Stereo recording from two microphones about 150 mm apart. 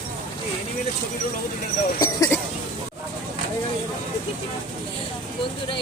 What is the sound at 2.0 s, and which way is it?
Speech, 20° left (ahead or behind).